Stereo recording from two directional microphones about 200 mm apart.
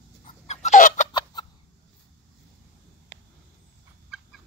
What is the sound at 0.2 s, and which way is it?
Chicken, 35° left (ahead or behind).